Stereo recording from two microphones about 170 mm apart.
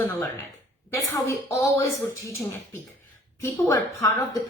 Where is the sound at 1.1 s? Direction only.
15° left (ahead or behind).